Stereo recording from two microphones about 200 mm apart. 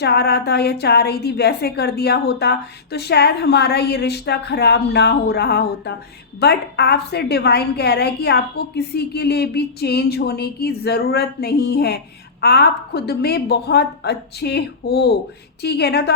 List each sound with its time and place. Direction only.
0.0 s a woman's voice: 55° left (ahead or behind)